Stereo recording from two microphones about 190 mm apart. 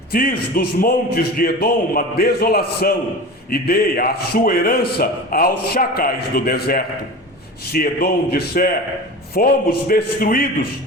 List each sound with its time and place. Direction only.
0.1 s a man's voice: 50° left (ahead or behind)